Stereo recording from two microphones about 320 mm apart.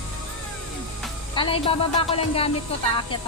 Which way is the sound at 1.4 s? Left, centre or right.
Centre.